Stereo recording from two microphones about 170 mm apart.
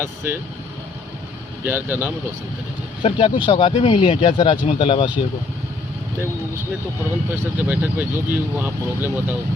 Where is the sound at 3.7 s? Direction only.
40° left (ahead or behind).